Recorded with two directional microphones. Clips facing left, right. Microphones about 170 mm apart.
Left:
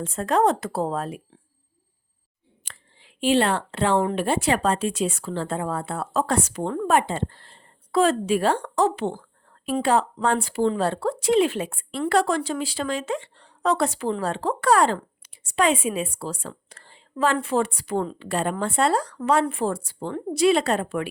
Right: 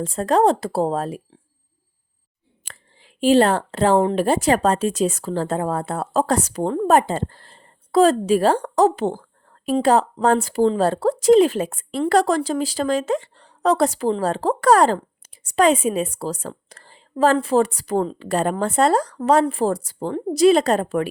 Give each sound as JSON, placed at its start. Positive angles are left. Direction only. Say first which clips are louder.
{"t": 0.0, "sound": "speech", "louder": "right 4 dB", "side_deg": -35}
{"t": 2.6, "sound": "a sound", "louder": "right 3 dB", "side_deg": -90}
{"t": 3.0, "sound": "speech", "louder": "right 5 dB", "side_deg": -40}